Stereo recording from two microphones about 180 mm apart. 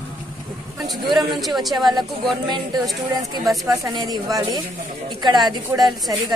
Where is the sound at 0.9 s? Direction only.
25° right (ahead or behind).